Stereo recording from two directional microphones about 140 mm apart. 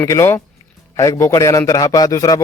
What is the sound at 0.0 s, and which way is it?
A man's voice, 20° left (ahead or behind).